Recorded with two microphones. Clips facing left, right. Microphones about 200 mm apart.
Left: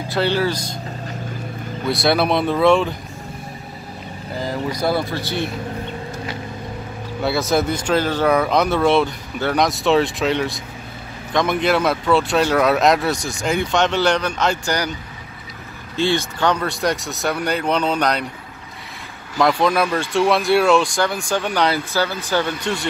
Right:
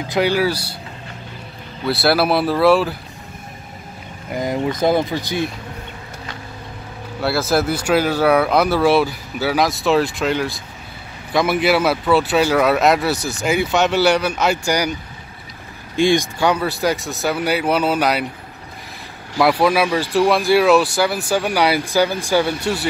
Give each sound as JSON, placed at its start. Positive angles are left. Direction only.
{"t": 0.1, "sound": "speech", "side_deg": -10}
{"t": 1.9, "sound": "speech", "side_deg": -5}
{"t": 4.4, "sound": "speech", "side_deg": -20}
{"t": 7.2, "sound": "speech", "side_deg": 0}
{"t": 16.0, "sound": "speech", "side_deg": -15}
{"t": 19.3, "sound": "speech", "side_deg": -5}